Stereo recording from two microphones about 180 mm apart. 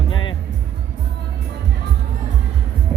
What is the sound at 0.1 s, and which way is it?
Music, 25° left (ahead or behind).